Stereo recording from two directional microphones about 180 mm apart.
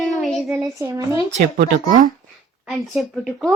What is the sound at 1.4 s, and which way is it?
Speech, 45° right (ahead or behind).